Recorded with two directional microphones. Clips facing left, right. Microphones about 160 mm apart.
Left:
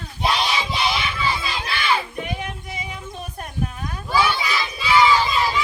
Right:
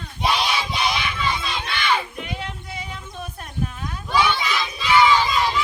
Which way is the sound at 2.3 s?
15° left (ahead or behind).